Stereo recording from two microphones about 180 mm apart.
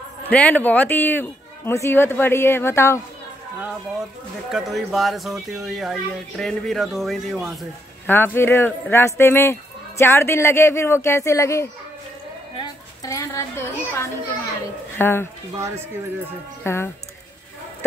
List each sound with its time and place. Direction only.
0.3 s speech: 10° left (ahead or behind)
4.5 s speech: centre (ahead or behind)
8.1 s speech: 10° left (ahead or behind)
12.5 s a sound: 15° left (ahead or behind)
15.0 s speech: 15° left (ahead or behind)
16.6 s speech: 15° left (ahead or behind)